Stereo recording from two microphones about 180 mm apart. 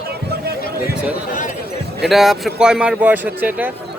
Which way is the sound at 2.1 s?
Centre (ahead or behind).